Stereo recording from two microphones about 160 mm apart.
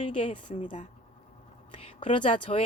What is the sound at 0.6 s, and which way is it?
Speech, 50° left (ahead or behind).